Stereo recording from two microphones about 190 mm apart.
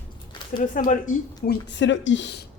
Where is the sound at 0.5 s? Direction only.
45° left (ahead or behind).